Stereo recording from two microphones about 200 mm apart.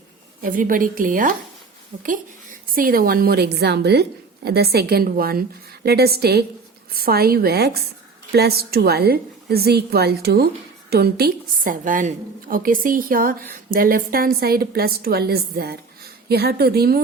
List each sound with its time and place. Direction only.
0.4 s a woman's voice: 45° right (ahead or behind)